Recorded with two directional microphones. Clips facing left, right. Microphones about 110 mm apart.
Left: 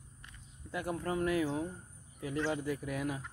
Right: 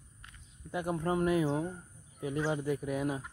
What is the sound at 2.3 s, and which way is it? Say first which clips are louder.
Speech: right 2 dB; 20° right (ahead or behind).